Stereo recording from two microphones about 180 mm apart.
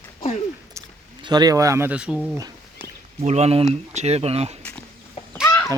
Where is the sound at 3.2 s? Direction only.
35° right (ahead or behind).